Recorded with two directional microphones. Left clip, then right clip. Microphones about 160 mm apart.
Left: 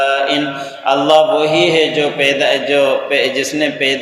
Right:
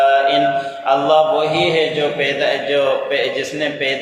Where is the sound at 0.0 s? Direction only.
35° left (ahead or behind).